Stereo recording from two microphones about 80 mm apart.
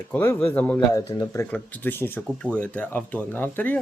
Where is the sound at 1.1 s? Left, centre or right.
Left.